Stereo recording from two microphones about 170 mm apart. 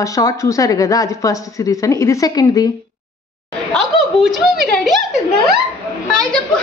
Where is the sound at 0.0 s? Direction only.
20° left (ahead or behind).